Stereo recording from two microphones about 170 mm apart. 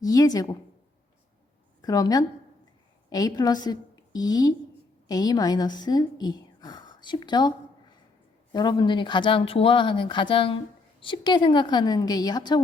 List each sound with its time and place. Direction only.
0.0 s speech: 20° left (ahead or behind)
1.8 s a woman's voice: 20° left (ahead or behind)
8.5 s speech: 25° left (ahead or behind)